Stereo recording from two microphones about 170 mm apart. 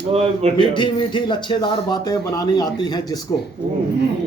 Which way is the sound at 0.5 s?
25° left (ahead or behind).